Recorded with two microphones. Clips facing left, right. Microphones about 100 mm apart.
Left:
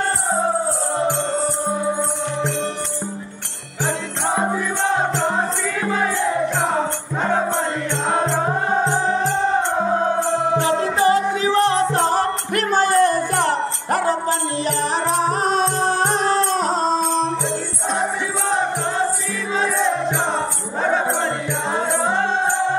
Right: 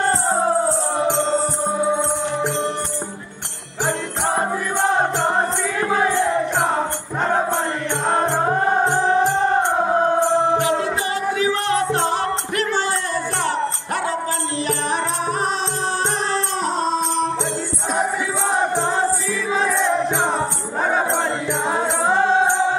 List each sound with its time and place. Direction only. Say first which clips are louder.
4.4 s music: even; 5° right (ahead or behind)
8.8 s music: right 2 dB; 15° right (ahead or behind)
10.8 s music: left 6 dB; 35° left (ahead or behind)
12.5 s music: left 8 dB; 50° left (ahead or behind)
15.0 s music: left 3 dB; 35° left (ahead or behind)
15.5 s music: left 5 dB; 50° left (ahead or behind)
20.3 s music: right 1 dB; 10° right (ahead or behind)